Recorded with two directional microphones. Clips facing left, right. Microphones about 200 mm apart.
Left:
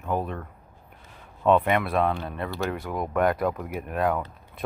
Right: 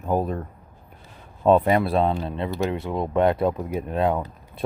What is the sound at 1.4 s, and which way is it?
Speech, 35° right (ahead or behind).